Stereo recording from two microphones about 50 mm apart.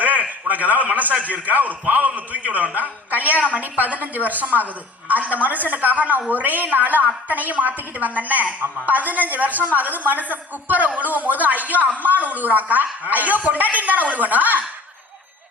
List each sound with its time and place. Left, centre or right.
0.3 s a woman's voice: right